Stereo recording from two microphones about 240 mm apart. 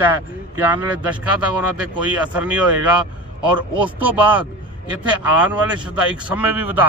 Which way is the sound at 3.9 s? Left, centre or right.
Centre.